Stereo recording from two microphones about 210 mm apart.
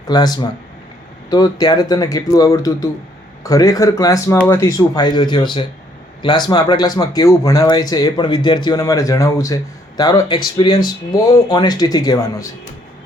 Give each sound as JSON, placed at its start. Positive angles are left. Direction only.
{"t": 0.1, "sound": "a man's voice", "side_deg": 20}